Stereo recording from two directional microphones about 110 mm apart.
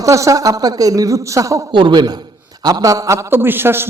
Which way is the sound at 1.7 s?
45° right (ahead or behind).